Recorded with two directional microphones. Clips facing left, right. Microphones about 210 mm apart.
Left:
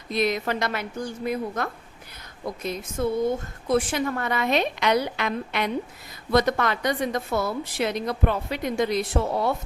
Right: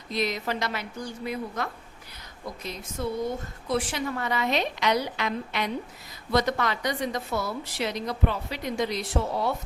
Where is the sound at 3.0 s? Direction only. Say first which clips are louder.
Left 5 dB; 50° left (ahead or behind).